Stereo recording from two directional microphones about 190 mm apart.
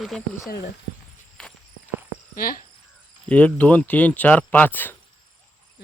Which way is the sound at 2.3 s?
50° left (ahead or behind).